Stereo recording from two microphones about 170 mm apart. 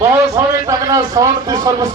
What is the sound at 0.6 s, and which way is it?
A man's voice, 20° right (ahead or behind).